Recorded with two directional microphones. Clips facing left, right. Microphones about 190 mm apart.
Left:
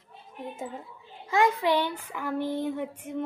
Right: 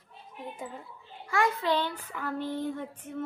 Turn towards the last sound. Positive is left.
turn(degrees=10)  # may be behind; listen again after turning